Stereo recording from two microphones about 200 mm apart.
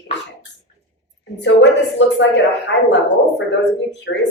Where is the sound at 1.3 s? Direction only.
65° left (ahead or behind).